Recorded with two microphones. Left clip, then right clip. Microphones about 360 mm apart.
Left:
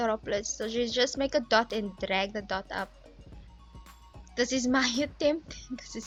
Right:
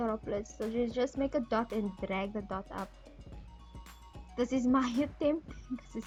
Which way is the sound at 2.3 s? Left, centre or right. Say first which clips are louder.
Left 6 dB; left.